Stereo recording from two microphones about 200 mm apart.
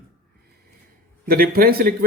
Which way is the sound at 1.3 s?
50° right (ahead or behind).